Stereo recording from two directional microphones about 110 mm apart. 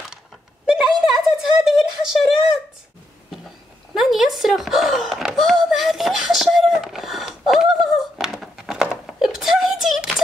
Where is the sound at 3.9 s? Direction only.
Centre (ahead or behind).